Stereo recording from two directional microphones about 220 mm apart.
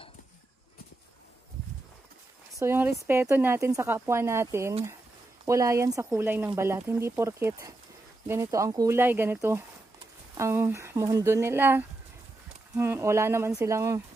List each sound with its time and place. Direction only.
2.6 s speech: 10° right (ahead or behind)